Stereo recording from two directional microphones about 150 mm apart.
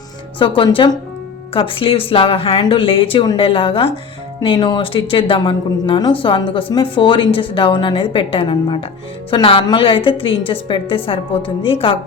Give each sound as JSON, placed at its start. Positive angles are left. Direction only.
{"t": 0.3, "sound": "a woman's voice", "side_deg": 35}